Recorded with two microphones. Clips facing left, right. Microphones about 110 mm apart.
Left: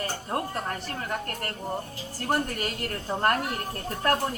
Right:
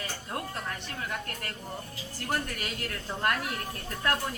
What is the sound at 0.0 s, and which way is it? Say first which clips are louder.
A woman's voice: left 6 dB; 40° left (ahead or behind).